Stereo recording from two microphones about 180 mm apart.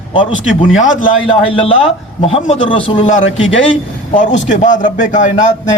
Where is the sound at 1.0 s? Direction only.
30° left (ahead or behind).